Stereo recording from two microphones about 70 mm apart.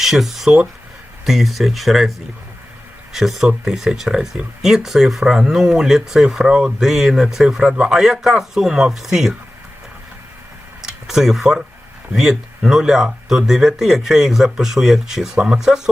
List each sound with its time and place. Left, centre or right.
0.0 s speech: centre
10.8 s a sound: centre
12.1 s speech: centre